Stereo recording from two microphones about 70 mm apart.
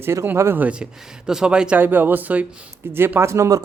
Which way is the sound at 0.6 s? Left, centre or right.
Centre.